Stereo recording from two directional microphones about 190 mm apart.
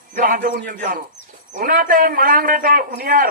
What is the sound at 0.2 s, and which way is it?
A man's voice, 50° right (ahead or behind).